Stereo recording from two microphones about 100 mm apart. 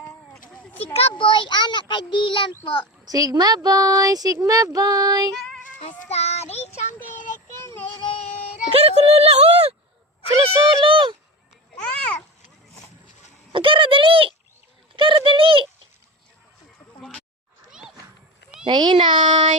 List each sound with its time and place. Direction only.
0.9 s a child's voice: 75° left (ahead or behind)
1.3 s a child's voice: 50° left (ahead or behind)
3.1 s speech: 40° right (ahead or behind)
6.1 s child singing: 90° left
7.9 s a sound: 60° left (ahead or behind)
8.7 s speech: 85° right
10.4 s speech: 60° right (ahead or behind)
11.8 s a sound: 10° left (ahead or behind)
13.5 s a sound: 55° right (ahead or behind)
14.9 s bird: 55° right (ahead or behind)
17.7 s a sound: 5° right (ahead or behind)
18.6 s speech: 50° right (ahead or behind)